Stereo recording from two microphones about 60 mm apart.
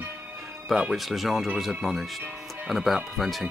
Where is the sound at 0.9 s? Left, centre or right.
Centre.